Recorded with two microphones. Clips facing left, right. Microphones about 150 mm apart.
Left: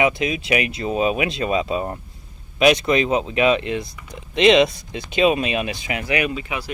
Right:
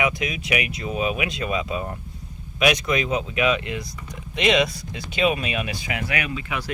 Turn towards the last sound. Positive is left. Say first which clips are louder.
# left 5 dB
turn(degrees=25)  # may be behind; listen again after turning